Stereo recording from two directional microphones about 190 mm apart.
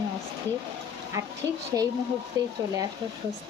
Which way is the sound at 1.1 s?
15° right (ahead or behind).